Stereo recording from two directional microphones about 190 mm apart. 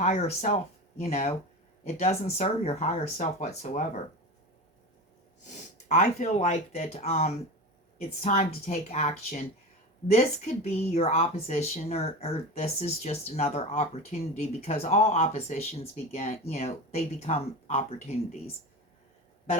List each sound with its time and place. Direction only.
0.0 s speech: 35° left (ahead or behind)
5.9 s speech: 40° left (ahead or behind)